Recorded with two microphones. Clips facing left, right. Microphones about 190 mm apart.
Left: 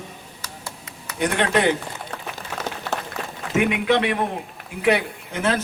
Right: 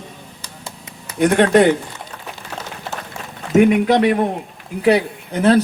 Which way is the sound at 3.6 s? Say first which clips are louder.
Right 7 dB; 45° right (ahead or behind).